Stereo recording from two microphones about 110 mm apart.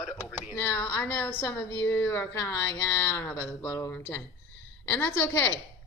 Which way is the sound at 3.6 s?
25° left (ahead or behind).